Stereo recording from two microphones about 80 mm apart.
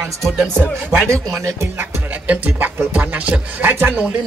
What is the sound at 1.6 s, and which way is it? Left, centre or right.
Music, right.